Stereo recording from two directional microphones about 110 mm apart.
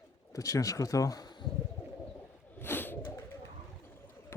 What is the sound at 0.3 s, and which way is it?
Speech, 30° left (ahead or behind).